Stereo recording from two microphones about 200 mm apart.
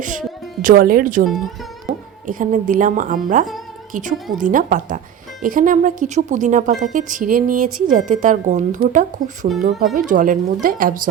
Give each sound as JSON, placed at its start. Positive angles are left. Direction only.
{"t": 0.6, "sound": "speech", "side_deg": -45}
{"t": 2.2, "sound": "a woman's voice", "side_deg": -40}
{"t": 4.4, "sound": "a woman's voice", "side_deg": -40}